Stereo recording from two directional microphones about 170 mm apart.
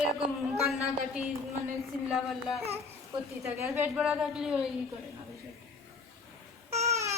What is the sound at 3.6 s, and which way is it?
A man's voice, 10° right (ahead or behind).